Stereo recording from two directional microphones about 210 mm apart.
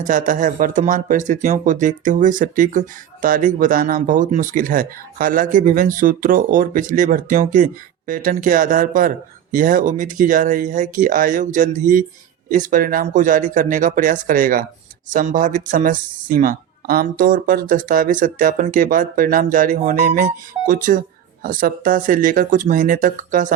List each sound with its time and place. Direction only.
0.0 s speech: 40° right (ahead or behind)